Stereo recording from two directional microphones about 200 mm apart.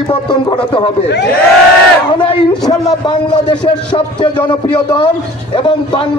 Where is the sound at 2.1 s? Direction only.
25° left (ahead or behind).